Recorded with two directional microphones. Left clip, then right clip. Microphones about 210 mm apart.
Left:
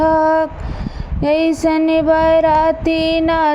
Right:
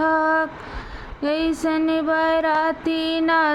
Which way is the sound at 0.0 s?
15° left (ahead or behind).